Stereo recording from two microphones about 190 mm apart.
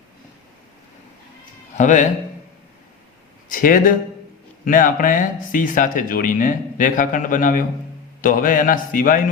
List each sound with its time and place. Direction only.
1.7 s a man's voice: 40° left (ahead or behind)
3.5 s speech: 45° left (ahead or behind)